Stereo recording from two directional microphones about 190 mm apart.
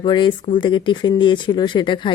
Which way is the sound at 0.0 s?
25° left (ahead or behind).